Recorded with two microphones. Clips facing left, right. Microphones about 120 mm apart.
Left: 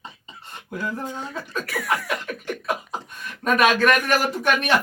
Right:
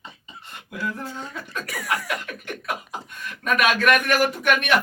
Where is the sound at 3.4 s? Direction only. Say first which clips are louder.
Left 2 dB; 35° left (ahead or behind).